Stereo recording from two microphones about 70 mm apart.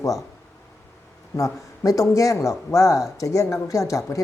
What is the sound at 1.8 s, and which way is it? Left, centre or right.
Speech, left.